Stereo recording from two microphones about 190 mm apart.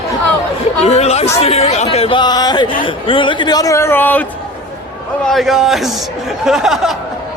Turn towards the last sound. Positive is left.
turn(degrees=0)  # may be behind; listen again after turning